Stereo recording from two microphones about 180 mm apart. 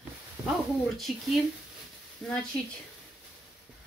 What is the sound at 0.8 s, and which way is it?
Speech, centre (ahead or behind).